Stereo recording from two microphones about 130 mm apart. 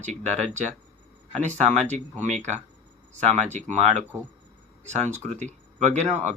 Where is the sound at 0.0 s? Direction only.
65° right (ahead or behind).